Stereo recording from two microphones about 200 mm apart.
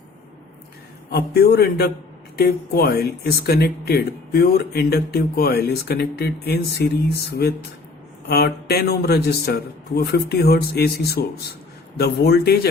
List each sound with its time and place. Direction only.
1.1 s speech: 55° left (ahead or behind)
8.3 s speech: 55° left (ahead or behind)